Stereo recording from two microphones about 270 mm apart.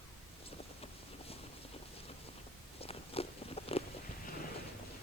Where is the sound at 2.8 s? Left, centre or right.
Left.